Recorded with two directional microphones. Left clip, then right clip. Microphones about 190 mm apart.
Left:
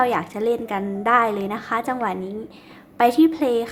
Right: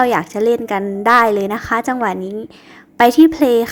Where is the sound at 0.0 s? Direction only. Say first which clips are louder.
Right 6 dB; 40° right (ahead or behind).